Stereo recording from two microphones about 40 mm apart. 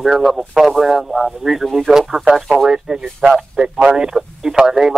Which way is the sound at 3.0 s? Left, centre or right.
Right.